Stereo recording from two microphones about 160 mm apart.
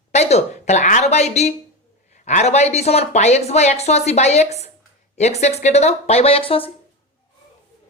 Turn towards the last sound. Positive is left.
turn(degrees=35)  # may be behind; listen again after turning